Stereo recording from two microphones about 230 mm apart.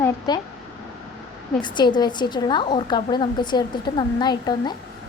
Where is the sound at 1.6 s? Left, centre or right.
Centre.